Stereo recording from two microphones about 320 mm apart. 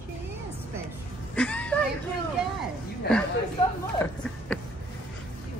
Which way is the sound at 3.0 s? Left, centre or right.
Left.